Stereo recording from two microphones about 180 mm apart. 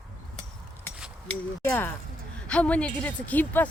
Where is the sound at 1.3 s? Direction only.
10° left (ahead or behind).